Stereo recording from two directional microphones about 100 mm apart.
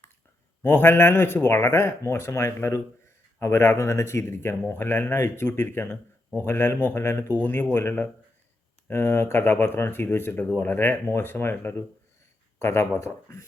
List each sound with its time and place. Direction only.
0.6 s speech: 20° left (ahead or behind)